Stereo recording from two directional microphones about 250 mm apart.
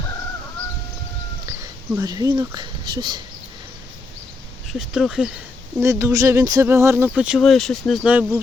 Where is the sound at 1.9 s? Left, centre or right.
Centre.